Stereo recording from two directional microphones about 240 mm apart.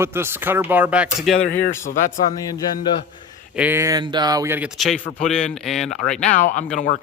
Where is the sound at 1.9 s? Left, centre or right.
Left.